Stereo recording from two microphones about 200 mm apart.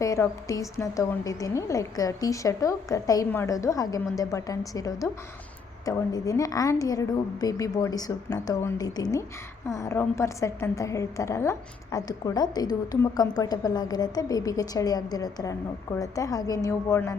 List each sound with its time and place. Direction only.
0.0 s a woman's voice: 15° left (ahead or behind)